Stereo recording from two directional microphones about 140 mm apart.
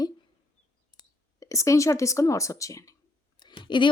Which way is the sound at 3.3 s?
30° left (ahead or behind).